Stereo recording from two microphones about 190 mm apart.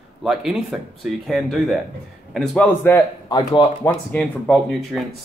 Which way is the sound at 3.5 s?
25° left (ahead or behind).